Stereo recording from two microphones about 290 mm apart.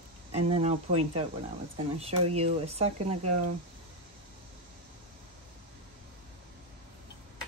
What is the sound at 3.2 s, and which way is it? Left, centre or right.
Speech, right.